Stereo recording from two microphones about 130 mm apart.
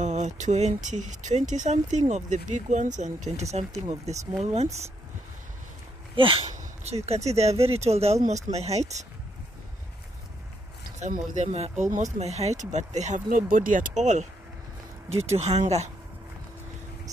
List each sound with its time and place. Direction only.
0.0 s speech: 65° right (ahead or behind)
6.1 s speech: 40° right (ahead or behind)
6.5 s a sound: 55° right (ahead or behind)
7.1 s speech: 55° right (ahead or behind)
11.0 s speech: 65° right (ahead or behind)
15.2 s speech: 55° right (ahead or behind)